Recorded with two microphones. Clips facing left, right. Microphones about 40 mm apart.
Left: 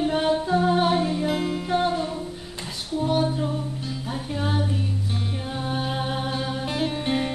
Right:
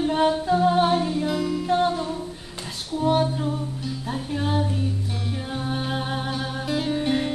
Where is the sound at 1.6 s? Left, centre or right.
Centre.